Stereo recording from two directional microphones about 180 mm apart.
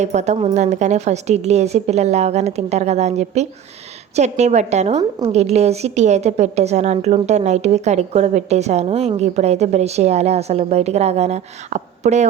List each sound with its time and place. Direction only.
0.0 s a woman's voice: 40° right (ahead or behind)